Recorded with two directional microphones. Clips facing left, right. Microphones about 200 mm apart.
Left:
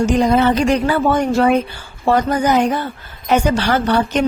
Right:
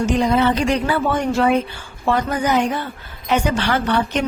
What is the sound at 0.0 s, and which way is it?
A woman's voice, 45° left (ahead or behind).